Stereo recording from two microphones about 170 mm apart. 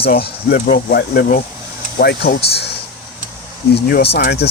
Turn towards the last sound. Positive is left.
turn(degrees=75)  # may be behind; listen again after turning